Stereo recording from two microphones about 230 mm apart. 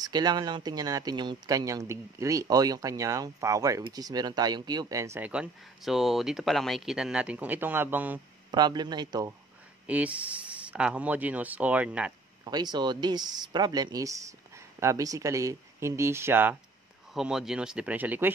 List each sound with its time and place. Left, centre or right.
0.0 s speech: centre
8.5 s speech: centre
9.8 s speech: centre
12.4 s speech: centre